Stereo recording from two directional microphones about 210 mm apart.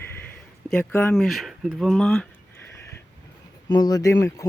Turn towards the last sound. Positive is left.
turn(degrees=15)  # may be behind; listen again after turning